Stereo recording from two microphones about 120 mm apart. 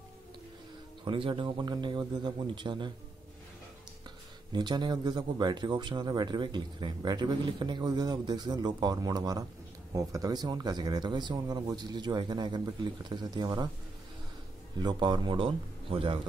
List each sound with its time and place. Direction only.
1.0 s speech: 45° right (ahead or behind)
4.5 s speech: 40° right (ahead or behind)
14.8 s speech: 35° right (ahead or behind)